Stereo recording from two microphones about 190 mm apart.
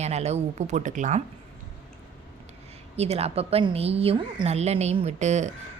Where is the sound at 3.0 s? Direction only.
35° right (ahead or behind).